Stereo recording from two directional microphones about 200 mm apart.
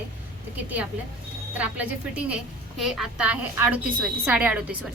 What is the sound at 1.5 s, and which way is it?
A woman's voice, 5° right (ahead or behind).